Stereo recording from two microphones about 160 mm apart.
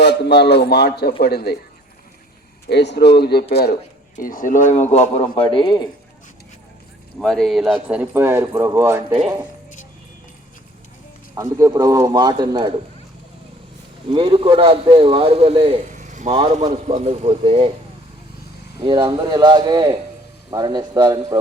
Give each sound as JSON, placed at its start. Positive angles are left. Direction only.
{"t": 0.0, "sound": "a man's voice", "side_deg": 90}
{"t": 2.6, "sound": "speech", "side_deg": 90}
{"t": 3.5, "sound": "speech", "side_deg": 80}
{"t": 4.1, "sound": "speech", "side_deg": 60}
{"t": 7.2, "sound": "speech", "side_deg": 5}
{"t": 11.3, "sound": "a man's voice", "side_deg": -20}
{"t": 14.1, "sound": "a man's voice", "side_deg": -30}
{"t": 15.9, "sound": "a man's voice", "side_deg": -50}
{"t": 18.9, "sound": "a man's voice", "side_deg": -30}